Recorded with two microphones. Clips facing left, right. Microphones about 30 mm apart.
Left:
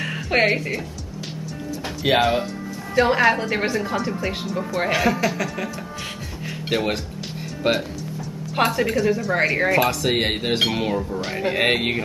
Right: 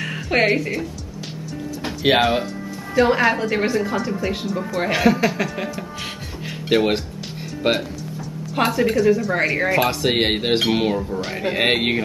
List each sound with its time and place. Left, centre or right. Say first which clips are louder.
0.0 s speech: right 1 dB; centre
2.0 s speech: right 2 dB; right
3.0 s a woman's voice: right 1 dB; centre
6.7 s speech: right 5 dB; centre
8.5 s a woman's voice: right 2 dB; centre
9.8 s speech: right 2 dB; centre
11.0 s a woman's voice: even; centre